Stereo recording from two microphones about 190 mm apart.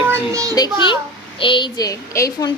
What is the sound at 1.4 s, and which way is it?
A child's voice, 25° left (ahead or behind).